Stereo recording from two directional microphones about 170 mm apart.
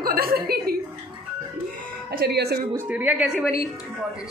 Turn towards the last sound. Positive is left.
turn(degrees=-5)  # may be behind; listen again after turning